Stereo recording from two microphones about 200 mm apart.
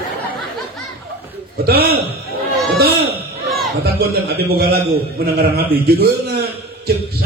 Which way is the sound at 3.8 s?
50° right (ahead or behind).